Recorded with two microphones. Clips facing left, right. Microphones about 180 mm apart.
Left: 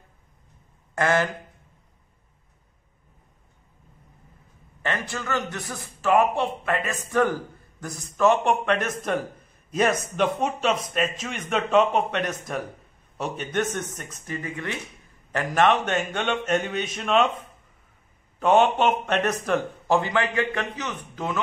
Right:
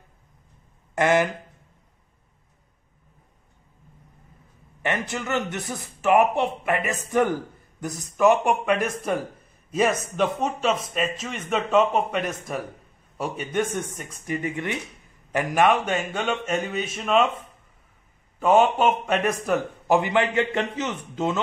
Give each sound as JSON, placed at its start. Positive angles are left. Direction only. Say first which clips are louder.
{"t": 0.9, "sound": "a man's voice", "louder": "right 2 dB", "side_deg": -15}
{"t": 4.8, "sound": "a man's voice", "louder": "right 2 dB", "side_deg": -20}
{"t": 18.4, "sound": "speech", "louder": "right 1 dB", "side_deg": -5}
{"t": 20.0, "sound": "a man's voice", "louder": "right 2 dB", "side_deg": -20}